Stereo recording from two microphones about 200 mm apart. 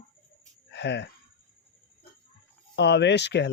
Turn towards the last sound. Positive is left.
turn(degrees=60)  # may be behind; listen again after turning